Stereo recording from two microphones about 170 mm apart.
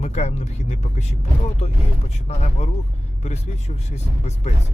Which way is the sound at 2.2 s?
40° left (ahead or behind).